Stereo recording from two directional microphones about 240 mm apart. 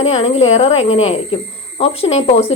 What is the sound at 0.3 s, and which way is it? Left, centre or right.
Speech, left.